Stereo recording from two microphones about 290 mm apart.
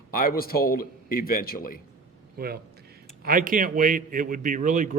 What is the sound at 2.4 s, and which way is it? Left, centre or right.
A man's voice, right.